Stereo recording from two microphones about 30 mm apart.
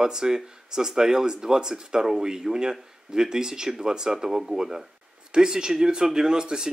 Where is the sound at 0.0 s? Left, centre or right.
Right.